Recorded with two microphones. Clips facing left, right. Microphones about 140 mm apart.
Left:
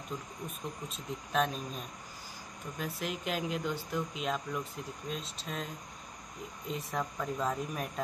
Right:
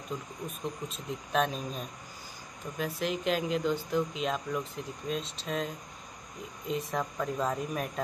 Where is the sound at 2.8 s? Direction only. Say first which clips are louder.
Right 6 dB; 5° left (ahead or behind).